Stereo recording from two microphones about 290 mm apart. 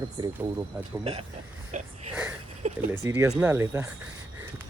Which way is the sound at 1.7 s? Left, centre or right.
Right.